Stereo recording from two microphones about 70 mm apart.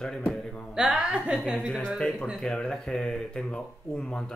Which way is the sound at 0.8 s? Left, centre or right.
Centre.